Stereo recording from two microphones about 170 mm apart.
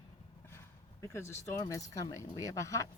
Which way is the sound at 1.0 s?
15° left (ahead or behind).